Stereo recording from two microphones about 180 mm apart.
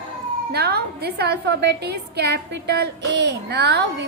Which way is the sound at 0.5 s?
65° right (ahead or behind).